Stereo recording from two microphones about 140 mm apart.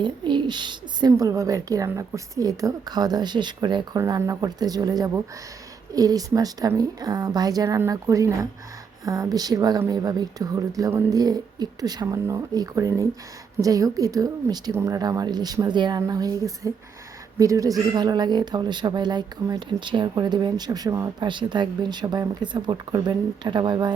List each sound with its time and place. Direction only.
0.0 s speech: 35° right (ahead or behind)